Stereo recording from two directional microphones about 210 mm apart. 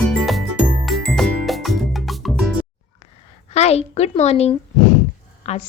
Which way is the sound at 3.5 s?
30° left (ahead or behind).